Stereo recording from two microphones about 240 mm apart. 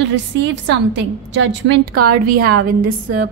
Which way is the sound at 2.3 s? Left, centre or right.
Right.